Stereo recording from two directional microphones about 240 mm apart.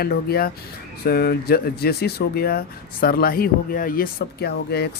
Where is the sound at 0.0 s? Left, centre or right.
Left.